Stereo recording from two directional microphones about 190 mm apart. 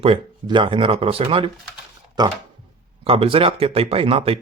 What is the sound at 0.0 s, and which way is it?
Speech, 25° right (ahead or behind).